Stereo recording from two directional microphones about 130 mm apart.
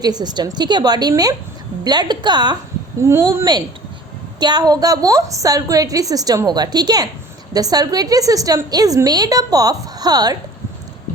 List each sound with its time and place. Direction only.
0.0 s a woman's voice: 30° right (ahead or behind)
3.0 s a woman's voice: 20° right (ahead or behind)
4.4 s a woman's voice: 35° right (ahead or behind)